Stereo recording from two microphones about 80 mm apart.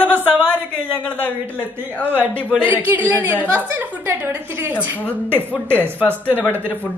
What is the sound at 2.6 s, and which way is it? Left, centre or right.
A woman's voice, right.